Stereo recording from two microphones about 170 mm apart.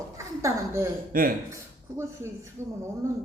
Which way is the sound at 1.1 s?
55° right (ahead or behind).